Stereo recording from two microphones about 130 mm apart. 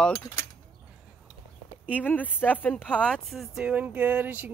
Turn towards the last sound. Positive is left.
turn(degrees=-10)  # may be behind; listen again after turning